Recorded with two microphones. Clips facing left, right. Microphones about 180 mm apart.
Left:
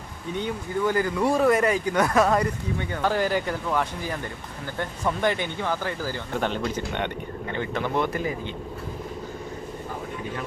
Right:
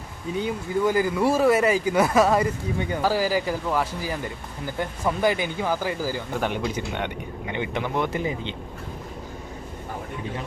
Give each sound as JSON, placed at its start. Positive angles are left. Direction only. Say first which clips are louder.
{"t": 0.3, "sound": "speech", "louder": "right 2 dB", "side_deg": -10}